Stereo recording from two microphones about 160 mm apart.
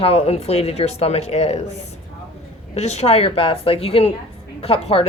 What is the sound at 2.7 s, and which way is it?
A woman's voice, 45° left (ahead or behind).